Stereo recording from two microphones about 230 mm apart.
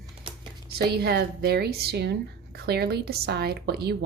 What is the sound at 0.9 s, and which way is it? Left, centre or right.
A woman's voice, right.